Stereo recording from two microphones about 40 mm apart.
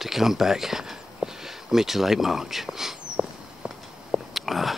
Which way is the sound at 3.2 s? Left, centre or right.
Right.